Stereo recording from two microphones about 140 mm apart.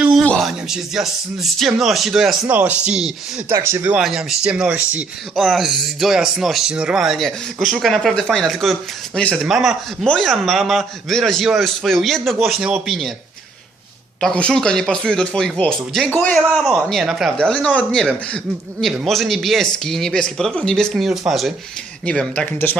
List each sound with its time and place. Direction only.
0.0 s a sound: 5° right (ahead or behind)
0.3 s speech: centre (ahead or behind)
3.5 s speech: 20° right (ahead or behind)
4.0 s speech: 5° right (ahead or behind)
14.2 s a man's voice: 5° left (ahead or behind)